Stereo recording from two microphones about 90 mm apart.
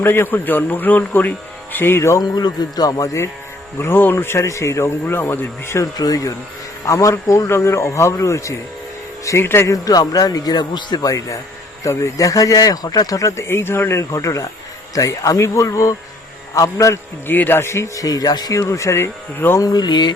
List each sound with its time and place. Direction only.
0.0 s a man's voice: 25° left (ahead or behind)
2.3 s speech: 45° left (ahead or behind)
3.8 s a man's voice: 25° left (ahead or behind)
6.0 s a man's voice: 40° left (ahead or behind); by 9.7 s 25° left (ahead or behind)
9.7 s speech: 45° left (ahead or behind)
11.8 s speech: 40° left (ahead or behind)
13.1 s speech: 30° left (ahead or behind)
17.3 s speech: 20° left (ahead or behind)
19.6 s speech: 50° left (ahead or behind)